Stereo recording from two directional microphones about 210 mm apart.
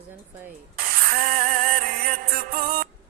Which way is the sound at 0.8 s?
45° right (ahead or behind).